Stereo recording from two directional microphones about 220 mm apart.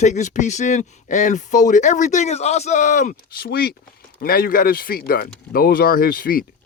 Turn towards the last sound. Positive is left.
turn(degrees=40)  # may be behind; listen again after turning